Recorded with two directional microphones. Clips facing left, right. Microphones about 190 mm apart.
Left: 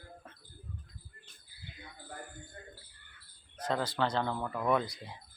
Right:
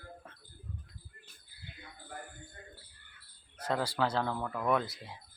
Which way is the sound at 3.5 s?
10° right (ahead or behind).